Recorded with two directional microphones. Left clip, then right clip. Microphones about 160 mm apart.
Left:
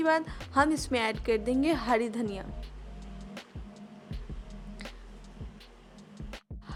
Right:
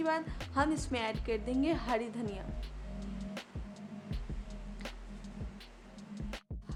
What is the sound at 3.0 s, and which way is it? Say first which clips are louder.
Music: right 1 dB; centre (ahead or behind).